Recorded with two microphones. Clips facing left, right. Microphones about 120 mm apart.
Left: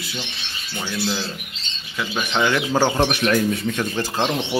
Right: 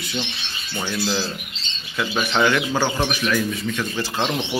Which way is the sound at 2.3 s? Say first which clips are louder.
Even; 15° left (ahead or behind).